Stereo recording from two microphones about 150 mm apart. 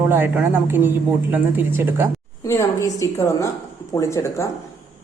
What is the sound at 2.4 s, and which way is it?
A woman's voice, 20° left (ahead or behind).